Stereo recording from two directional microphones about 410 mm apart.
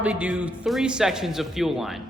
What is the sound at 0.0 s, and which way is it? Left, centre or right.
Speech, centre.